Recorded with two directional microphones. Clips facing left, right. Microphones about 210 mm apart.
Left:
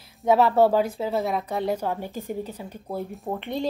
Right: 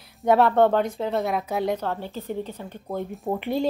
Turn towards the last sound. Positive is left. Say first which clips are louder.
# right 3 dB
turn(degrees=-5)  # may be behind; listen again after turning